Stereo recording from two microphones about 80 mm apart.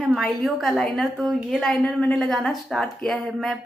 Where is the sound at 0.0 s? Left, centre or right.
Centre.